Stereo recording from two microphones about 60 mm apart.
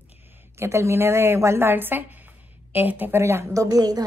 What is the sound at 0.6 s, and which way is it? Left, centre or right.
A woman's voice, right.